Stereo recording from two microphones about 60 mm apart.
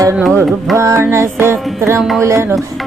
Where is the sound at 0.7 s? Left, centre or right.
Right.